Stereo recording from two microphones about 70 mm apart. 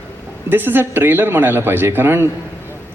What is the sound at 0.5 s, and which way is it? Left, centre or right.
A man's voice, right.